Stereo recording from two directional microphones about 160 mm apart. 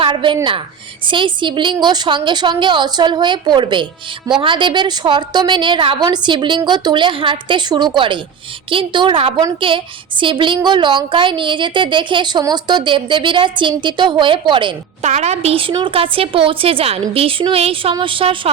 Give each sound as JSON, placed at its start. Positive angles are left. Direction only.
{"t": 0.0, "sound": "a sound", "side_deg": -30}
{"t": 1.0, "sound": "a woman's voice", "side_deg": -30}
{"t": 15.0, "sound": "a woman's voice", "side_deg": -45}